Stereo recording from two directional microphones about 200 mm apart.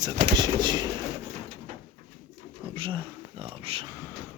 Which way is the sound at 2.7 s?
25° right (ahead or behind).